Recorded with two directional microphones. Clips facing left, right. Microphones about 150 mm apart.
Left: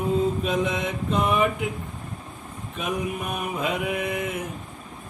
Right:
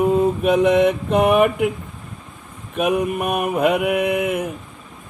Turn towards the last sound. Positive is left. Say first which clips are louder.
# right 8 dB
turn(degrees=-60)  # may be behind; listen again after turning